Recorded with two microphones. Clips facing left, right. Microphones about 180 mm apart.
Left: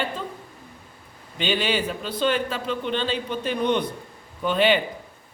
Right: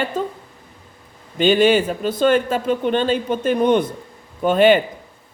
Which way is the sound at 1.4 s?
45° right (ahead or behind).